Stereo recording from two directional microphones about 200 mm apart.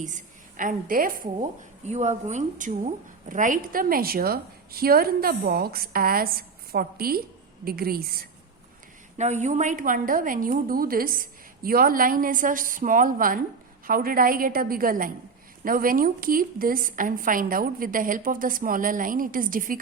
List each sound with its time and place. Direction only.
0.0 s a woman's voice: 40° right (ahead or behind)
9.1 s a woman's voice: 35° right (ahead or behind)